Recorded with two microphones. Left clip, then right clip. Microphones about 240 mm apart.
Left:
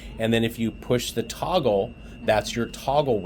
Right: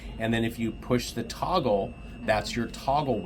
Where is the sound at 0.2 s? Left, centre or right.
Left.